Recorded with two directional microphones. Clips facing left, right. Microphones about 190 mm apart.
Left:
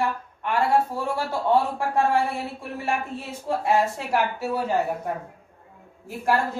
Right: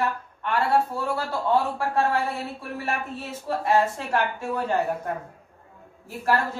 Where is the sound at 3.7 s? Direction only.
10° left (ahead or behind).